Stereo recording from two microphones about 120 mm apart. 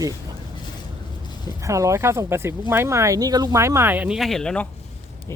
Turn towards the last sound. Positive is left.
turn(degrees=5)  # may be behind; listen again after turning